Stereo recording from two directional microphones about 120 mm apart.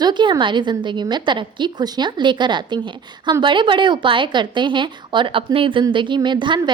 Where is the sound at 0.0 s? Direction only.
40° right (ahead or behind).